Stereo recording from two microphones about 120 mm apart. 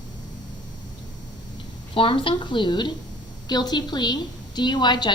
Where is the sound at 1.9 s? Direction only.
45° left (ahead or behind).